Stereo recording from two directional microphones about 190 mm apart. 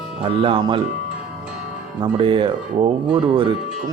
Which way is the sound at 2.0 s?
25° right (ahead or behind).